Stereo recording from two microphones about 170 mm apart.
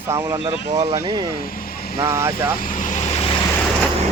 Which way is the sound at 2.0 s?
15° right (ahead or behind).